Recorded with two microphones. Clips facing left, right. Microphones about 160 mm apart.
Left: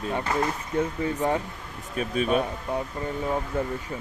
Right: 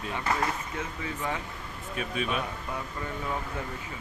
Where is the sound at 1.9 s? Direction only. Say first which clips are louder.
Left 7 dB; 40° left (ahead or behind).